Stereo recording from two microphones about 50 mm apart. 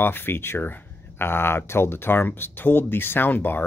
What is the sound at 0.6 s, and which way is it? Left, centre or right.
Speech, left.